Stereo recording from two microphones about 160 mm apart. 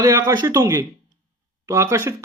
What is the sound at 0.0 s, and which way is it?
Speech, 20° right (ahead or behind).